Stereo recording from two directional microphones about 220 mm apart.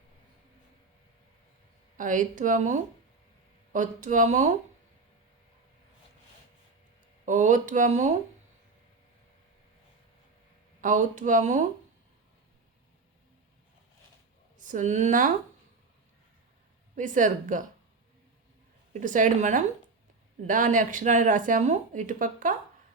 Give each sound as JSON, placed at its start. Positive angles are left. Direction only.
{"t": 2.0, "sound": "speech", "side_deg": -35}
{"t": 7.3, "sound": "speech", "side_deg": -35}
{"t": 10.8, "sound": "speech", "side_deg": -35}
{"t": 14.6, "sound": "a woman's voice", "side_deg": -35}
{"t": 16.9, "sound": "speech", "side_deg": -35}
{"t": 18.9, "sound": "speech", "side_deg": -35}